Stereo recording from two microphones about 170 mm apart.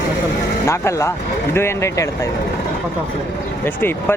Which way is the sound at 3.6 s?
10° left (ahead or behind).